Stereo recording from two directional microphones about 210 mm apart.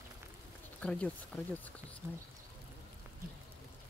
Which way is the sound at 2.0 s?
5° right (ahead or behind).